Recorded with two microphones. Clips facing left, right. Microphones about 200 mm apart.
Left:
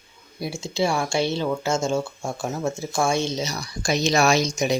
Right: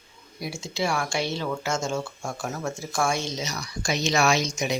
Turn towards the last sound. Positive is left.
turn(degrees=35)  # may be behind; listen again after turning